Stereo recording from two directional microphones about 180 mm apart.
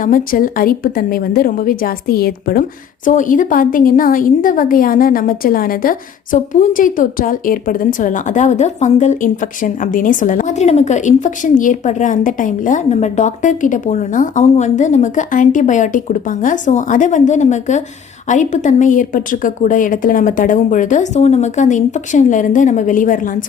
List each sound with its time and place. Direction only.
0.0 s a woman's voice: 50° left (ahead or behind)